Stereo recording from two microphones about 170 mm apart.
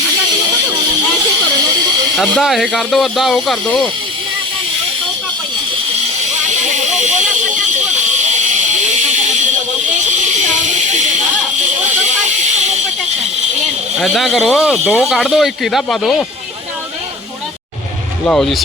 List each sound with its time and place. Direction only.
2.1 s speech: centre (ahead or behind)
7.0 s hiss: 45° right (ahead or behind)
14.0 s speech: centre (ahead or behind)
18.3 s speech: centre (ahead or behind)